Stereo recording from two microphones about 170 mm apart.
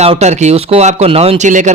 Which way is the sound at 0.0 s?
40° right (ahead or behind).